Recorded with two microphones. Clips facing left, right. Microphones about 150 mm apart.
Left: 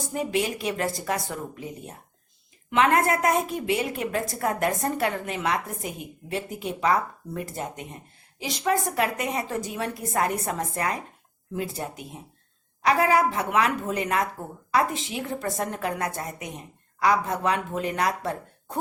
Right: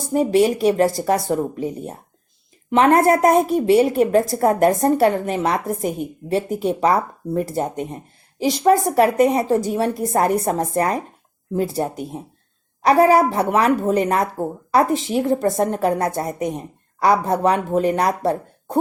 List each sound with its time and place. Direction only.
0.1 s a woman's voice: 35° right (ahead or behind)